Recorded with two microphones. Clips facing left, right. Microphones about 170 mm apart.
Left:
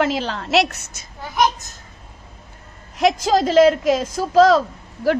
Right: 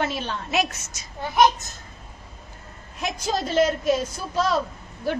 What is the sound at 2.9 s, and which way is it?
A woman's voice, 90° left.